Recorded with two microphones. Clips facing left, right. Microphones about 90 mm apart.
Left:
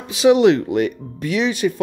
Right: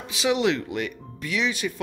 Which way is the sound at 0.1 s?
50° left (ahead or behind).